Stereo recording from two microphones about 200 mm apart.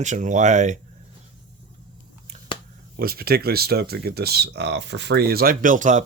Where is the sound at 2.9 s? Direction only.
50° right (ahead or behind).